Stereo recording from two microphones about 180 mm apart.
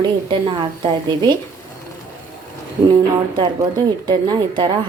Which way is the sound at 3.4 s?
25° right (ahead or behind).